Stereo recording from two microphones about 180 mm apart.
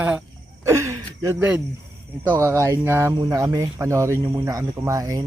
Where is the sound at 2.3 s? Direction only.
15° right (ahead or behind).